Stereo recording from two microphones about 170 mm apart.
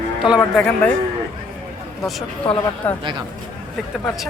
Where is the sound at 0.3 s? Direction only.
Centre (ahead or behind).